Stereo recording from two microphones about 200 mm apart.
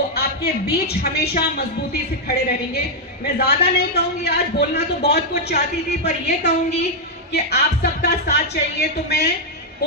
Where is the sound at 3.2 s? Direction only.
50° left (ahead or behind).